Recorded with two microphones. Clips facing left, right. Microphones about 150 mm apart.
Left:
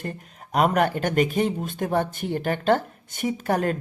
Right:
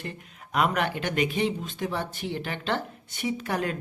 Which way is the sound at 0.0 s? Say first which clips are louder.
Left 4 dB; 45° left (ahead or behind).